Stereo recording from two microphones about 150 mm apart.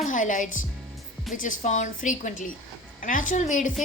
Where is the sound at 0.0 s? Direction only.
60° left (ahead or behind).